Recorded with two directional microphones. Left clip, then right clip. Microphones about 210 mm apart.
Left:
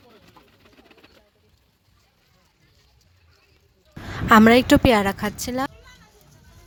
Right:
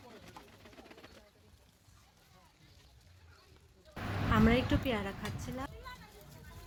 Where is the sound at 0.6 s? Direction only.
35° left (ahead or behind).